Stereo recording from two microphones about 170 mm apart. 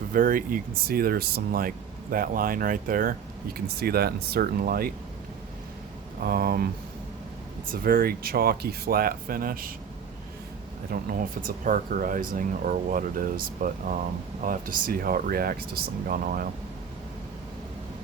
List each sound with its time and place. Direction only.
0.1 s speech: 55° right (ahead or behind)
3.8 s speech: 65° right (ahead or behind)
6.2 s speech: 60° right (ahead or behind)
7.7 s speech: 60° right (ahead or behind)
10.9 s speech: 55° right (ahead or behind)